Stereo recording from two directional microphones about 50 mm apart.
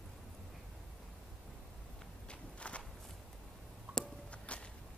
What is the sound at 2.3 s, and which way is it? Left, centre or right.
Walk, left.